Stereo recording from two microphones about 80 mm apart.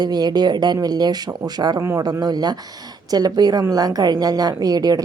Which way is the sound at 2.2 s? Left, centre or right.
Right.